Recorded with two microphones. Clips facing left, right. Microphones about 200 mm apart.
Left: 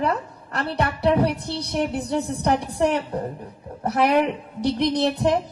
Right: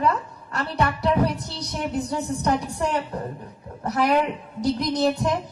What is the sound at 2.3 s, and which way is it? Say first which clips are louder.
Speech: even; 30° left (ahead or behind).